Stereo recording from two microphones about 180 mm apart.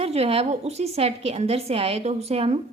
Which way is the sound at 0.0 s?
35° right (ahead or behind).